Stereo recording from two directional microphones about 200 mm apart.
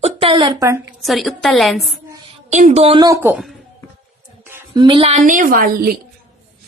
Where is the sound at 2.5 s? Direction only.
35° right (ahead or behind); by 3.5 s 5° right (ahead or behind).